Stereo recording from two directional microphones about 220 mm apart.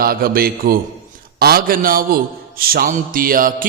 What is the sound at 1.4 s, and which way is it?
A man's voice, 40° right (ahead or behind).